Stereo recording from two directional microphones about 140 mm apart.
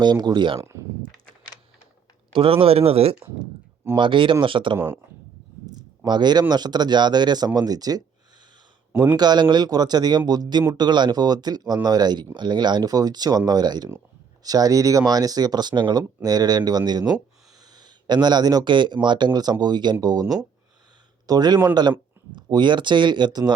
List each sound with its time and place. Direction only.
0.0 s speech: 30° right (ahead or behind)
0.6 s speech: 20° right (ahead or behind)
2.3 s speech: 40° right (ahead or behind)
6.1 s speech: 30° right (ahead or behind)
9.1 s speech: 30° right (ahead or behind)